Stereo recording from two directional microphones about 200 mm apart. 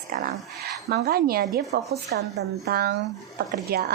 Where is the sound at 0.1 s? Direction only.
45° right (ahead or behind).